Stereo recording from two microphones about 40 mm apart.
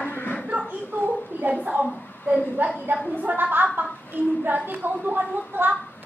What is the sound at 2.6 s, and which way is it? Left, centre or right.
A woman's voice, right.